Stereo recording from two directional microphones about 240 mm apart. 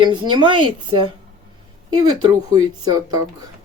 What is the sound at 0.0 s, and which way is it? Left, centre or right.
Speech, centre.